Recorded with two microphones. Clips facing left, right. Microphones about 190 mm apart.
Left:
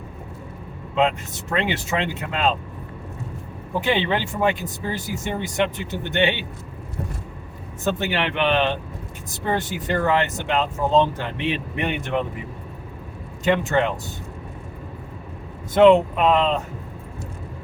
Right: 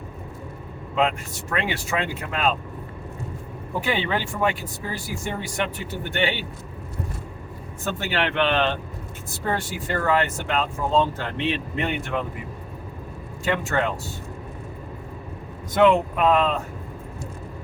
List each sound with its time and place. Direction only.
0.9 s speech: 20° left (ahead or behind)
3.8 s speech: 20° left (ahead or behind)
7.9 s speech: 15° left (ahead or behind)
13.4 s speech: 20° left (ahead or behind)
15.7 s speech: 25° left (ahead or behind)